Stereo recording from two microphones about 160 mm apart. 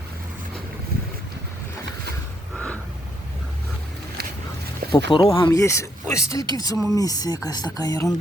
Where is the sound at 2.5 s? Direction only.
5° left (ahead or behind).